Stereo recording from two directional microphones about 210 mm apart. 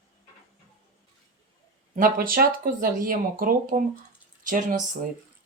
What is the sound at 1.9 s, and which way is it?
Speech, 40° right (ahead or behind).